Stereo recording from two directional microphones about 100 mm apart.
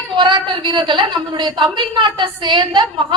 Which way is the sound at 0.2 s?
50° right (ahead or behind).